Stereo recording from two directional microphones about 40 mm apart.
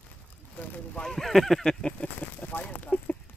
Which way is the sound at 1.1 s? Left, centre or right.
Centre.